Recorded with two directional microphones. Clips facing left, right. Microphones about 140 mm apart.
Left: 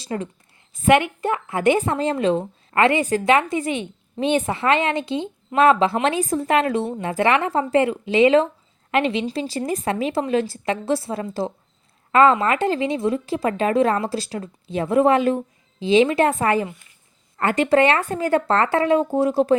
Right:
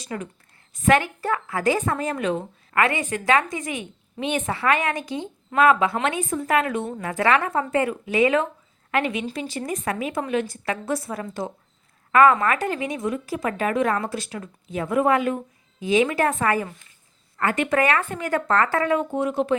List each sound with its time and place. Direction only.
0.0 s a woman's voice: 30° left (ahead or behind)